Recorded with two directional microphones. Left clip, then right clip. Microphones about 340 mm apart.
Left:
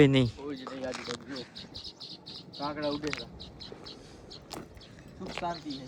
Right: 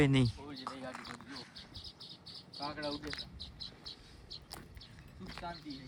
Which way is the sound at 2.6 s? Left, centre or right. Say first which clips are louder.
Left 7 dB; left.